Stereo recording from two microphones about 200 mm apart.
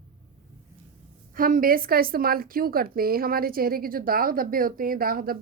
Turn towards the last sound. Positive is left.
turn(degrees=-45)  # may be behind; listen again after turning